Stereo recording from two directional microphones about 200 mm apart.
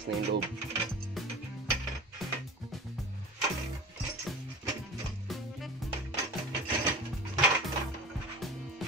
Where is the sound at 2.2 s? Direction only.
Centre (ahead or behind).